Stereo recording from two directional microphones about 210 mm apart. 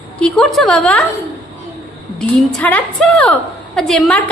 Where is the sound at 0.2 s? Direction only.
5° left (ahead or behind).